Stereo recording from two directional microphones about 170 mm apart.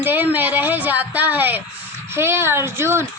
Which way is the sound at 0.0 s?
10° right (ahead or behind).